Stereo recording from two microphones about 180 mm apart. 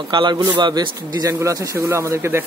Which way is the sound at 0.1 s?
25° right (ahead or behind).